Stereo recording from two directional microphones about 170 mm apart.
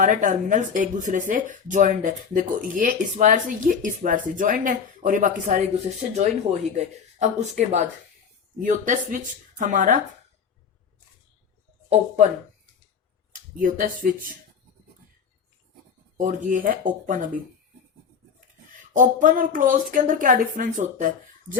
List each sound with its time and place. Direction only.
0.0 s speech: 50° right (ahead or behind)
13.3 s speech: 50° right (ahead or behind)
16.1 s speech: 50° right (ahead or behind)
18.9 s speech: 50° right (ahead or behind)